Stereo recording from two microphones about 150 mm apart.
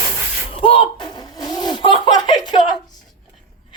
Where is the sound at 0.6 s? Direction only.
40° left (ahead or behind).